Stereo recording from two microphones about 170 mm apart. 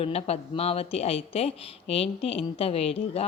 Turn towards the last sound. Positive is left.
turn(degrees=35)  # may be behind; listen again after turning